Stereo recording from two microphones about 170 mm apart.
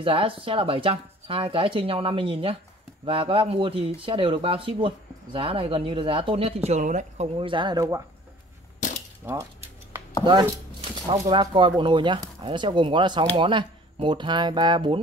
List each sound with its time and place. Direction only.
0.0 s speech: 30° right (ahead or behind)
7.3 s speech: 30° right (ahead or behind)
8.7 s cap gun: 50° left (ahead or behind)
9.2 s speech: 15° right (ahead or behind)
10.2 s a sound: 30° right (ahead or behind)
11.1 s speech: 25° right (ahead or behind)